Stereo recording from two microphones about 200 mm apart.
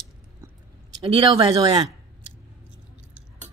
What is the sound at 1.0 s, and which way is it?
Speech, 25° right (ahead or behind).